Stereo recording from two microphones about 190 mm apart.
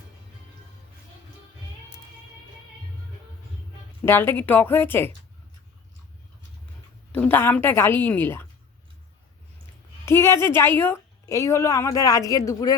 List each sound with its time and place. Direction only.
4.0 s a woman's voice: 10° left (ahead or behind)
7.1 s a woman's voice: 10° left (ahead or behind)
10.1 s a woman's voice: 15° left (ahead or behind)